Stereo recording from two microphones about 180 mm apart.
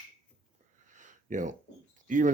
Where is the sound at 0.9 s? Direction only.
45° right (ahead or behind).